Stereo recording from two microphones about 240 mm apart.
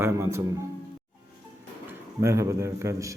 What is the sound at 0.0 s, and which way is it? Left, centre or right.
Speech, centre.